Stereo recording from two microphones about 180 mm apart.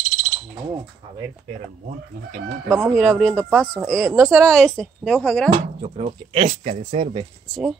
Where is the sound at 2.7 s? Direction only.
15° right (ahead or behind).